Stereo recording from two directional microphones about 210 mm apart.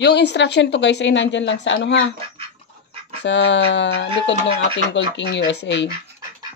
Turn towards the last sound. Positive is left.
turn(degrees=55)  # may be behind; listen again after turning